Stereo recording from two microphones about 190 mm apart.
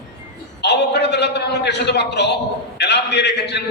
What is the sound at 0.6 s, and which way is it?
A man's voice, 65° left (ahead or behind).